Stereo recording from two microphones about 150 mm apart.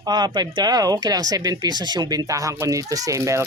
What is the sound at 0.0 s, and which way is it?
Speech, 30° right (ahead or behind).